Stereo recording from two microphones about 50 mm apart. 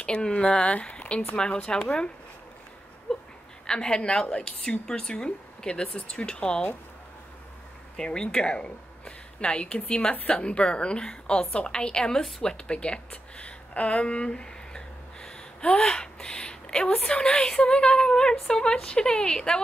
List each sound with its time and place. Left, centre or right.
0.0 s a woman's voice: centre
3.1 s a sound: centre
3.6 s a woman's voice: centre
8.0 s a woman's voice: centre
12.5 s a woman's voice: centre
17.6 s a woman's voice: centre